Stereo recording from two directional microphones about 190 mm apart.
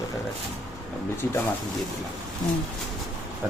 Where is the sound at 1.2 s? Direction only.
10° left (ahead or behind).